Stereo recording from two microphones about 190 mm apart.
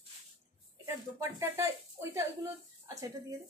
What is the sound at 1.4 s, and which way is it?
A woman's voice, 15° right (ahead or behind).